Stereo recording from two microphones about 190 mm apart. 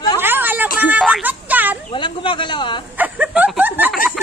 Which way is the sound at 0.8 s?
5° right (ahead or behind).